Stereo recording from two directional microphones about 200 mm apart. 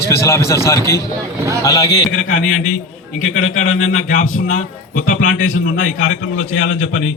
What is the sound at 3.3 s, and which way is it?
A man's voice, 40° left (ahead or behind).